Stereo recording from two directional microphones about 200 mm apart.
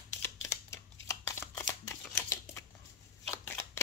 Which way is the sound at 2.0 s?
10° left (ahead or behind).